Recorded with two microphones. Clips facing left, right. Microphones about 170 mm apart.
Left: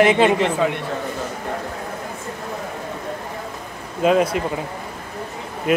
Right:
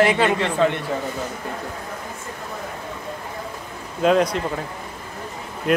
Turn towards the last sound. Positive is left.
turn(degrees=5)  # may be behind; listen again after turning